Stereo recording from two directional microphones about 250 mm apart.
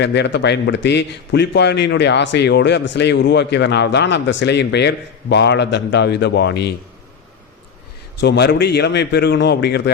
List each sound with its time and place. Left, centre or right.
0.0 s a man's voice: left
8.2 s a man's voice: left